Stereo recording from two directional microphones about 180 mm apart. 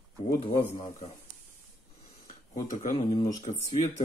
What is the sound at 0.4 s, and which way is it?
Speech, 30° left (ahead or behind).